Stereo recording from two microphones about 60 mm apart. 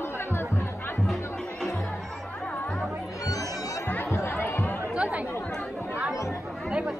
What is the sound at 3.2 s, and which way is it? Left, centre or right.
Music, left.